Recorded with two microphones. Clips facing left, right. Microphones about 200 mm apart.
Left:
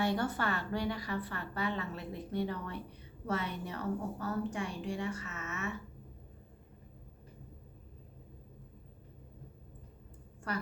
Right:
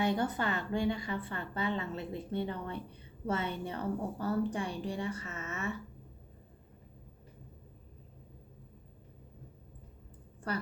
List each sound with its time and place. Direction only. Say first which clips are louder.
0.0 s a woman's voice: right 1 dB; 20° right (ahead or behind)